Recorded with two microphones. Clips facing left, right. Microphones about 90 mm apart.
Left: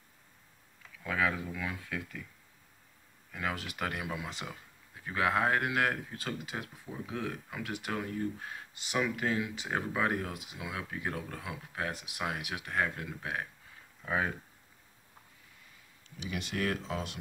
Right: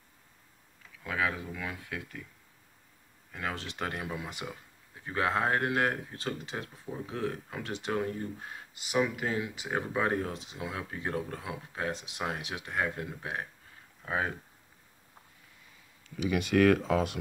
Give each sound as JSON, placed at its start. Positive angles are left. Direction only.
{"t": 1.0, "sound": "a sound", "side_deg": -15}
{"t": 1.8, "sound": "speech", "side_deg": -20}
{"t": 3.3, "sound": "speech", "side_deg": -25}
{"t": 4.3, "sound": "speech", "side_deg": -15}
{"t": 5.0, "sound": "speech", "side_deg": -30}
{"t": 9.9, "sound": "speech", "side_deg": -30}
{"t": 16.3, "sound": "speech", "side_deg": -85}